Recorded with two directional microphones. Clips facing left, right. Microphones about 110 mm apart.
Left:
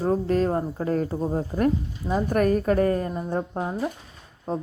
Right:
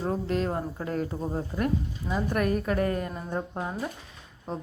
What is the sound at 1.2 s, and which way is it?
Speech, 20° left (ahead or behind).